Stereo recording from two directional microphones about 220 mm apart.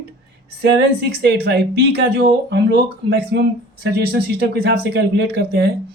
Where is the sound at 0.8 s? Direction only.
50° right (ahead or behind).